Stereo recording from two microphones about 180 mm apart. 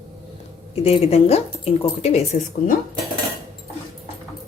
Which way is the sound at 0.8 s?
35° left (ahead or behind).